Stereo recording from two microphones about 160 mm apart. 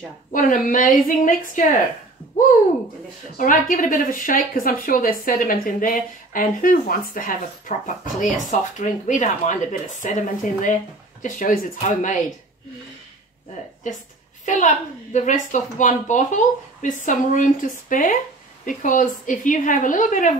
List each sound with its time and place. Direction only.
0.3 s a woman's voice: 55° left (ahead or behind)
3.3 s a woman's voice: 55° left (ahead or behind)
14.4 s a woman's voice: 50° left (ahead or behind)